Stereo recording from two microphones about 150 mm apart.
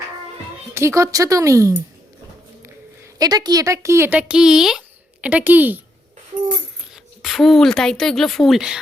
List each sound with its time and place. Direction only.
0.7 s speech: 20° right (ahead or behind)
3.2 s speech: 25° right (ahead or behind)
6.9 s speech: centre (ahead or behind)